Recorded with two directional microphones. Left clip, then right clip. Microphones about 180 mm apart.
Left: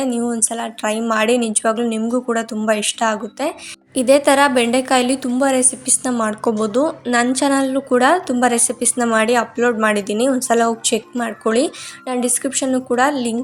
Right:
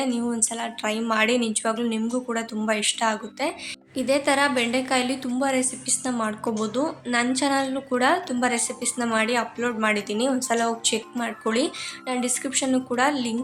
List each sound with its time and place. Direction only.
0.0 s a woman's voice: 30° left (ahead or behind)
3.9 s a woman's voice: 45° left (ahead or behind); by 13.3 s 30° left (ahead or behind)